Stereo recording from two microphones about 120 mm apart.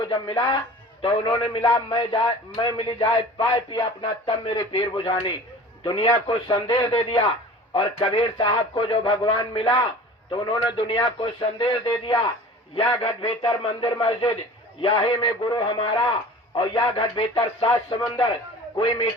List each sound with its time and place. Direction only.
0.0 s a man's voice: 40° left (ahead or behind)
13.8 s a man's voice: 35° left (ahead or behind)
17.7 s speech: 30° left (ahead or behind)